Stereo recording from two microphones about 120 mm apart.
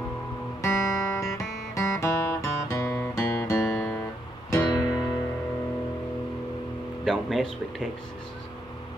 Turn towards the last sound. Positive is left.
turn(degrees=0)  # may be behind; listen again after turning